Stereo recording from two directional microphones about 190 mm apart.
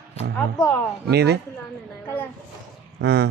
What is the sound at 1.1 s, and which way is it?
Speech, 60° right (ahead or behind).